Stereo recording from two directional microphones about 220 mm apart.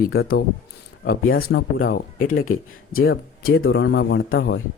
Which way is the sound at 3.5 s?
60° left (ahead or behind).